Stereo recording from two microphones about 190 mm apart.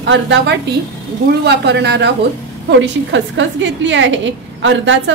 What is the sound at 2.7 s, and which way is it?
A woman's voice, 75° right (ahead or behind).